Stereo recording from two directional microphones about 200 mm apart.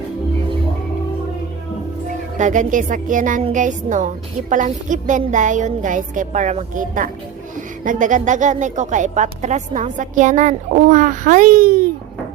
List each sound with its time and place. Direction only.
2.4 s speech: 40° right (ahead or behind)